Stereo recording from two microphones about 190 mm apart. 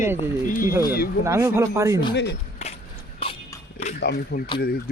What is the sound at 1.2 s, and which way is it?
Speech, 15° right (ahead or behind).